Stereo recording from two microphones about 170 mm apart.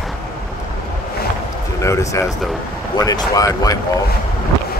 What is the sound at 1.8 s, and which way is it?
Speech, 15° left (ahead or behind).